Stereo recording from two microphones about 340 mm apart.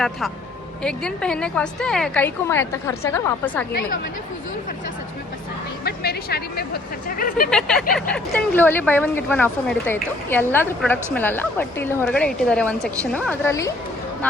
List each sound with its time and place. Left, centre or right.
0.8 s a woman's voice: centre
5.8 s speech: left
7.5 s a woman's voice: centre